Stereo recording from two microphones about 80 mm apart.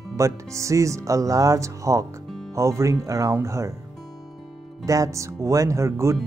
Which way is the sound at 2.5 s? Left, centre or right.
Right.